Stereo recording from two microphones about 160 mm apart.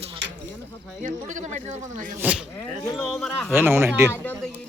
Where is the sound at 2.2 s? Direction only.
10° right (ahead or behind).